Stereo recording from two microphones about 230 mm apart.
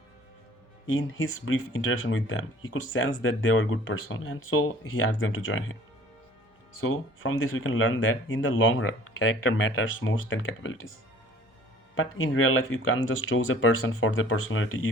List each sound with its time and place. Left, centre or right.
0.9 s speech: left
6.8 s speech: left
11.9 s speech: left